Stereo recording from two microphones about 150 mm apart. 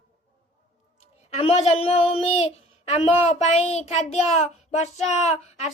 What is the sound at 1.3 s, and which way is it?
Child singing, 45° left (ahead or behind).